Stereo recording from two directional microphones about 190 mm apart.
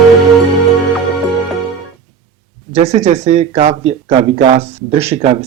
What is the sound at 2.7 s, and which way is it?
Speech, 35° right (ahead or behind).